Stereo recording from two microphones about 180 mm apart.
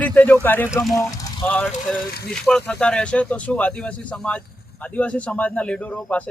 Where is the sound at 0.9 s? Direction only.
20° left (ahead or behind).